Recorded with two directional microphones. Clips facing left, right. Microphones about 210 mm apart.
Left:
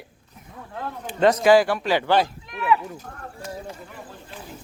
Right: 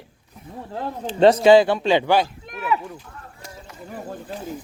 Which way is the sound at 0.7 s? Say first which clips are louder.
Right 4 dB; 30° right (ahead or behind).